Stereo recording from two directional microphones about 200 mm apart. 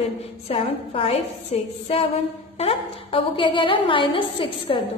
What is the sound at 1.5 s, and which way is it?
Music, 30° left (ahead or behind).